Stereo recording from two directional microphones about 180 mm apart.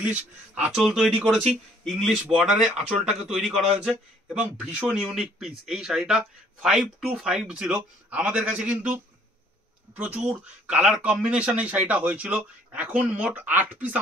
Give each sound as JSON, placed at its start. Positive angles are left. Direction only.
{"t": 0.6, "sound": "speech", "side_deg": 0}
{"t": 9.9, "sound": "speech", "side_deg": -5}